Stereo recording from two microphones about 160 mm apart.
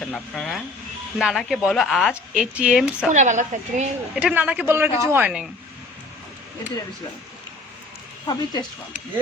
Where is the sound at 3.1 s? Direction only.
50° right (ahead or behind).